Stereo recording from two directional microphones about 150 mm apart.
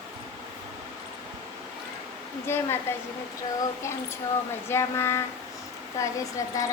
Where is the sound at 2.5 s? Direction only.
15° left (ahead or behind).